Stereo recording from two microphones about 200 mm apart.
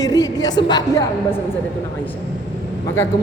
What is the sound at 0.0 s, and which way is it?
A woman's voice, 20° left (ahead or behind).